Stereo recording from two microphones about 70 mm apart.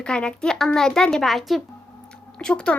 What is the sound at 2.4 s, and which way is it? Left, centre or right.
Speech, centre.